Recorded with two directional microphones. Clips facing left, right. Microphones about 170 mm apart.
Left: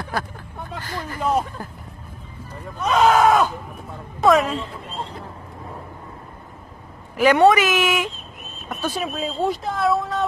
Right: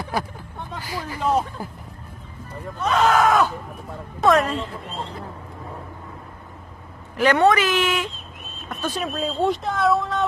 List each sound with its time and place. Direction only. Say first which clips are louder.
0.8 s speech: even; 10° right (ahead or behind)
2.8 s speech: left 2 dB; 15° left (ahead or behind)
4.2 s speech: left 1 dB; centre (ahead or behind)
7.2 s speech: left 3 dB; 10° left (ahead or behind)